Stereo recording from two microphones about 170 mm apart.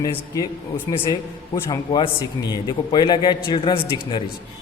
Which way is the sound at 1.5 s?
25° left (ahead or behind).